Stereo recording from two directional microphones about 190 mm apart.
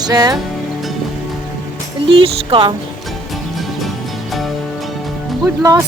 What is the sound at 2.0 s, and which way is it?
Speech, 30° right (ahead or behind).